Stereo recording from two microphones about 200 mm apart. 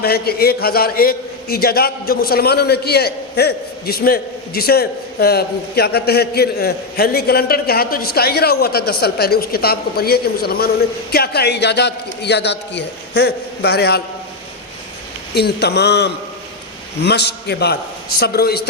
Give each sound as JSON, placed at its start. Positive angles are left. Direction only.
{"t": 0.0, "sound": "a man's voice", "side_deg": 50}
{"t": 15.4, "sound": "a man's voice", "side_deg": 55}